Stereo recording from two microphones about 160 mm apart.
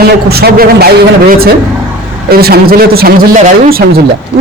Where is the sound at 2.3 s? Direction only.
70° right (ahead or behind).